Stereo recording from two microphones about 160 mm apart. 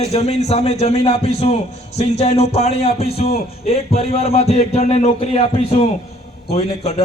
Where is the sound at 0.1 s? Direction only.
45° left (ahead or behind).